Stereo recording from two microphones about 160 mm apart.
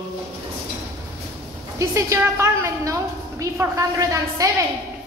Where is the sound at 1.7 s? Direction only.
20° right (ahead or behind).